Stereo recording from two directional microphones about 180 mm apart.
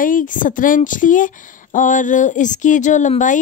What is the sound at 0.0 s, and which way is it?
Speech, 50° left (ahead or behind).